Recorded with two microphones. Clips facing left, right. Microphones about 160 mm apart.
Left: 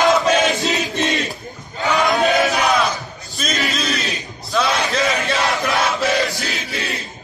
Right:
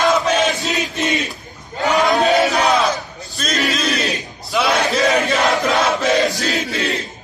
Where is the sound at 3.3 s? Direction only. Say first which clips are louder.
Right 2 dB; centre (ahead or behind).